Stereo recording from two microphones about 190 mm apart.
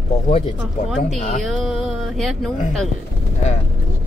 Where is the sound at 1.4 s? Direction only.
Centre (ahead or behind).